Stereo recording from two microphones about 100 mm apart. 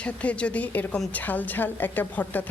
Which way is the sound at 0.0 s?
15° left (ahead or behind).